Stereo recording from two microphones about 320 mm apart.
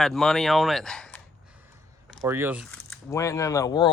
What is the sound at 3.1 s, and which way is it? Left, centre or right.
Speech, centre.